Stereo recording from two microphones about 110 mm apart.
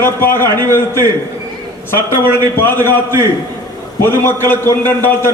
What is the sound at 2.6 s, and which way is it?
Speech, 20° left (ahead or behind).